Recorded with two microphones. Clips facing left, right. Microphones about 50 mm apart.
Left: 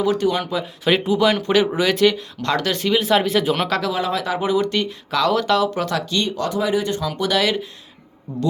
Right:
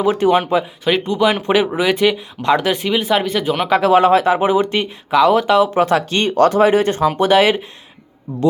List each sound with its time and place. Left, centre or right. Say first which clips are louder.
0.0 s speech: right 5 dB; right
0.9 s speech: even; centre
3.8 s speech: right 10 dB; right